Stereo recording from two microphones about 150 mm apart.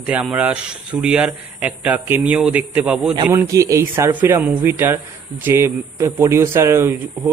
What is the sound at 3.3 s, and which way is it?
Speech, 20° right (ahead or behind).